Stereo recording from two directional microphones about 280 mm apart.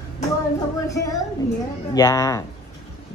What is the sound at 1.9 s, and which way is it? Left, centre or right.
Speech, centre.